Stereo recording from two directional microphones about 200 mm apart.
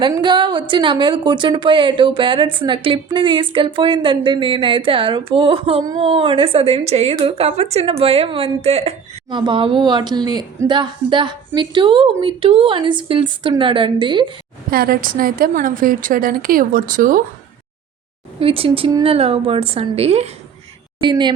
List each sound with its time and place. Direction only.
0.0 s a woman's voice: 20° right (ahead or behind)
14.7 s a woman's voice: 50° right (ahead or behind)
18.3 s a woman's voice: 30° right (ahead or behind)